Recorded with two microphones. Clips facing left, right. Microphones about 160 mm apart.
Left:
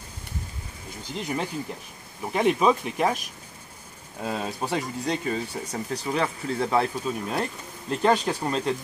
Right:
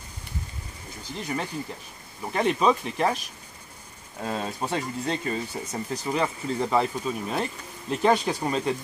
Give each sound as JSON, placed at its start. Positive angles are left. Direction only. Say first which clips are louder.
{"t": 1.1, "sound": "speech", "louder": "left 1 dB", "side_deg": 15}
{"t": 4.2, "sound": "speech", "louder": "even", "side_deg": 5}